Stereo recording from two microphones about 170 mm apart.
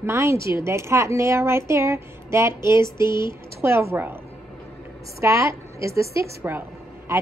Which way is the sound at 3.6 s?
15° right (ahead or behind).